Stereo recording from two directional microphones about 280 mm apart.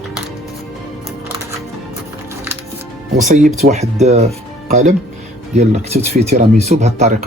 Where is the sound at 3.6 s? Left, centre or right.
Right.